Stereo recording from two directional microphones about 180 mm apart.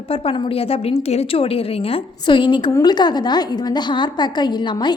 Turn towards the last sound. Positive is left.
turn(degrees=25)  # may be behind; listen again after turning